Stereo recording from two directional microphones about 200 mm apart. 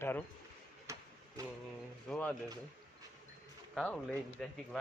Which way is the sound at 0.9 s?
15° right (ahead or behind).